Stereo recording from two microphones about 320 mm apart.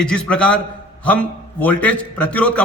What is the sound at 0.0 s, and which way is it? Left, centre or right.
A man's voice, centre.